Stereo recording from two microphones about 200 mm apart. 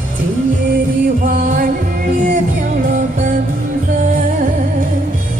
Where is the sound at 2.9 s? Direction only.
40° right (ahead or behind).